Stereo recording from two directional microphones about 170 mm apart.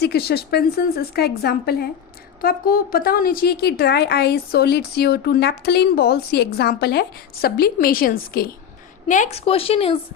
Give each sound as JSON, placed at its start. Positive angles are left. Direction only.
{"t": 0.0, "sound": "a woman's voice", "side_deg": 70}
{"t": 9.0, "sound": "a woman's voice", "side_deg": 50}
{"t": 9.5, "sound": "speech", "side_deg": 35}